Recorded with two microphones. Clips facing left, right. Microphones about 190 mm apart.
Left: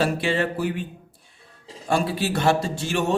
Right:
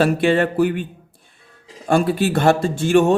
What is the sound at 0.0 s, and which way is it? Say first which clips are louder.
Speech: right 6 dB; 55° right (ahead or behind).